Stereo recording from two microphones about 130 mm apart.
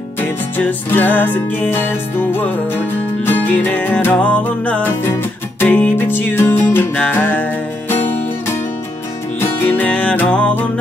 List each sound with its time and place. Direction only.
0.2 s music: 15° left (ahead or behind)